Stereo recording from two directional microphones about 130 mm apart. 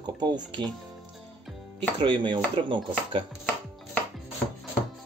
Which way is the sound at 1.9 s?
40° right (ahead or behind).